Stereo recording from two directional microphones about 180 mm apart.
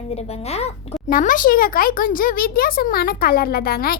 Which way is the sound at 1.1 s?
50° left (ahead or behind).